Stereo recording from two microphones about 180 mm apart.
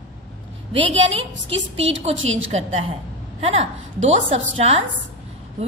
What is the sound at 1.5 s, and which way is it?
Speech, 90° right.